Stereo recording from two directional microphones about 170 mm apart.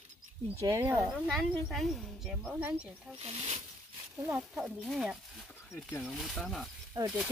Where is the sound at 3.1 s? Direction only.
35° right (ahead or behind).